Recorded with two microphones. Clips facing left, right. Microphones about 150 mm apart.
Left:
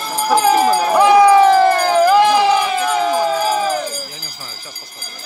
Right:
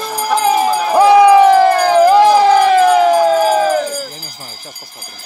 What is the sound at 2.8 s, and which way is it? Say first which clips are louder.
Siren: right 8 dB; 65° right (ahead or behind).